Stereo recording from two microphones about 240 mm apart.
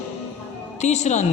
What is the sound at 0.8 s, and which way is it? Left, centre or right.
Speech, left.